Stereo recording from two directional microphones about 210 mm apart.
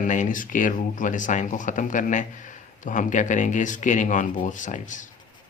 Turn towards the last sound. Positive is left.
turn(degrees=35)  # may be behind; listen again after turning